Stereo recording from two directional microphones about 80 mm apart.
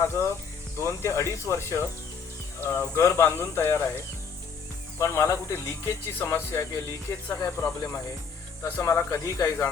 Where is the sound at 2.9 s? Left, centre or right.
Left.